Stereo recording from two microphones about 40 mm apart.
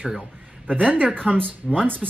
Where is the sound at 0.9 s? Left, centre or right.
Right.